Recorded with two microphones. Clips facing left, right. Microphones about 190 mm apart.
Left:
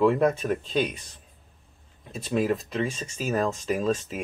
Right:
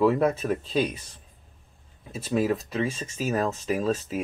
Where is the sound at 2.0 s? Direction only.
5° right (ahead or behind).